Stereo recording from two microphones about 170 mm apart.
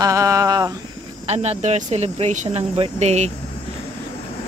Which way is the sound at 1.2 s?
40° right (ahead or behind).